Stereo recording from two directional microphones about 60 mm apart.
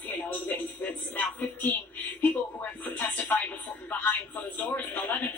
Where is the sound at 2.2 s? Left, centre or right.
Left.